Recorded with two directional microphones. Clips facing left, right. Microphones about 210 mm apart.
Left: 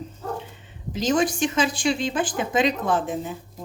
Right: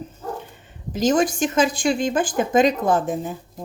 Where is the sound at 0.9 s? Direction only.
45° right (ahead or behind).